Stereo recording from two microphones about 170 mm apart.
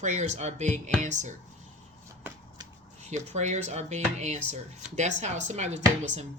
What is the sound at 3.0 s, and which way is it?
Speech, 40° right (ahead or behind).